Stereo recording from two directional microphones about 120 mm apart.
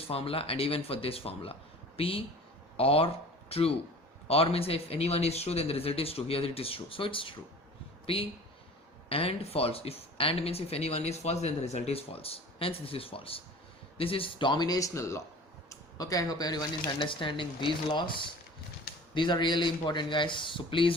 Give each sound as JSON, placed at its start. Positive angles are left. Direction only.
{"t": 0.1, "sound": "speech", "side_deg": 55}